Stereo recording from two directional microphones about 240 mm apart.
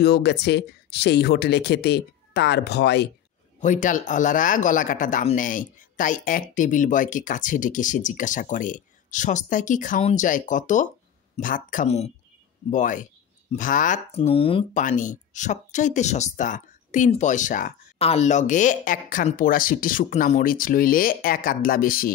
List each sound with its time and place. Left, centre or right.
0.0 s speech: left
3.6 s speech: left